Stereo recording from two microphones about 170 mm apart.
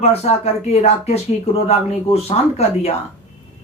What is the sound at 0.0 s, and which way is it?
Speech, 35° left (ahead or behind).